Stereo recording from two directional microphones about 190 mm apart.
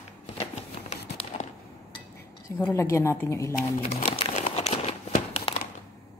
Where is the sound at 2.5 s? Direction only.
15° left (ahead or behind).